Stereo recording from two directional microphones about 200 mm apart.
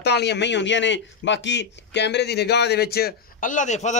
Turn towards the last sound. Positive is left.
turn(degrees=35)  # may be behind; listen again after turning